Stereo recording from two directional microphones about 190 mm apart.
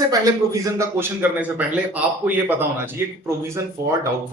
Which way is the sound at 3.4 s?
15° right (ahead or behind).